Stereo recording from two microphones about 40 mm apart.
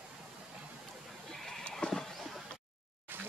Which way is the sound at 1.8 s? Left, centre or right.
Left.